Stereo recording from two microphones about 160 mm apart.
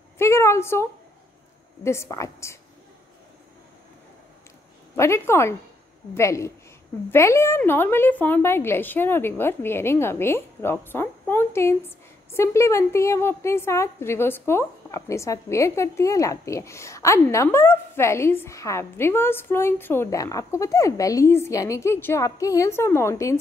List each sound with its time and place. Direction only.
0.2 s a sound: 15° left (ahead or behind)
1.8 s a woman's voice: 15° left (ahead or behind)
4.9 s a woman's voice: 15° left (ahead or behind)